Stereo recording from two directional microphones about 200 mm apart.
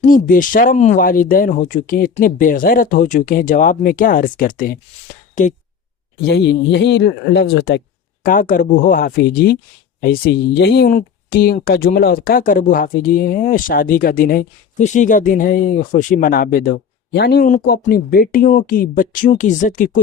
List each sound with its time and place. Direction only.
0.1 s speech: 40° left (ahead or behind)
6.2 s speech: 60° left (ahead or behind)
8.2 s speech: 45° left (ahead or behind)